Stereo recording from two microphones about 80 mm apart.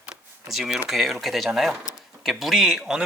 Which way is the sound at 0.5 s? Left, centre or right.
Centre.